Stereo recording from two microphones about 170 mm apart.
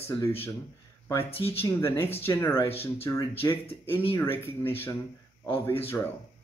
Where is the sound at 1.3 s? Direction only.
35° left (ahead or behind).